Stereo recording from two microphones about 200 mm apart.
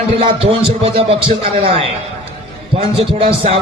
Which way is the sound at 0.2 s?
30° right (ahead or behind).